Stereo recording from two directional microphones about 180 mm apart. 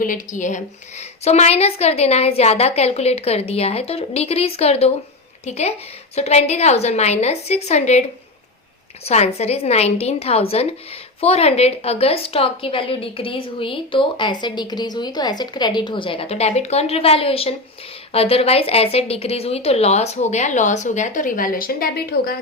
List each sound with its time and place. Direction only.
0.0 s a woman's voice: 45° left (ahead or behind)
9.0 s a woman's voice: 35° left (ahead or behind); by 22.4 s 55° left (ahead or behind)